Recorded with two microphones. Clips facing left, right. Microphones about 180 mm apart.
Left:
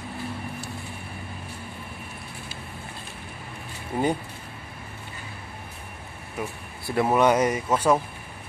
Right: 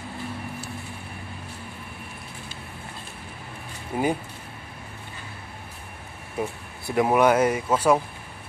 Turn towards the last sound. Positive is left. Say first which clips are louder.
# right 1 dB
turn(degrees=-10)  # may be behind; listen again after turning